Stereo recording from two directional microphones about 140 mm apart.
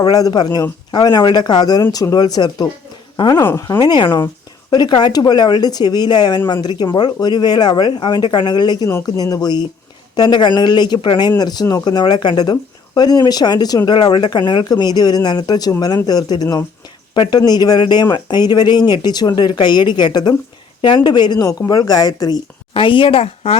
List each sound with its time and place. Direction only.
0.0 s speech: 25° left (ahead or behind)
22.7 s speech: 40° left (ahead or behind)